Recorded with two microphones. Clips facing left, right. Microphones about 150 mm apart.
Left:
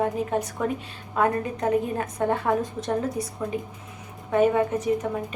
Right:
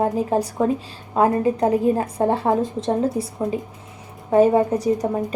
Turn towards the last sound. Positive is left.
turn(degrees=-35)  # may be behind; listen again after turning